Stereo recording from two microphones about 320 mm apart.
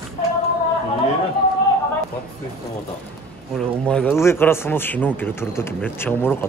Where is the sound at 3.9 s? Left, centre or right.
Centre.